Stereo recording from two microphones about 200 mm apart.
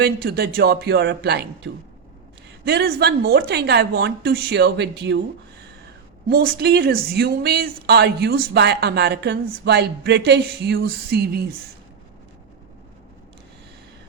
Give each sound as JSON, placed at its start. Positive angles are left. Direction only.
{"t": 0.0, "sound": "a woman's voice", "side_deg": -50}
{"t": 6.2, "sound": "speech", "side_deg": -50}